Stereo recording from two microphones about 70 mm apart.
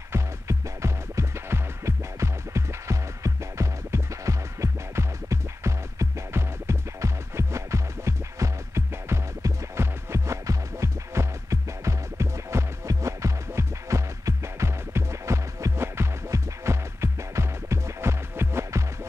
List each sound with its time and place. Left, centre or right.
0.1 s music: right